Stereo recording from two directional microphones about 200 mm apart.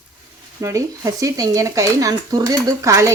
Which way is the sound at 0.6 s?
15° right (ahead or behind).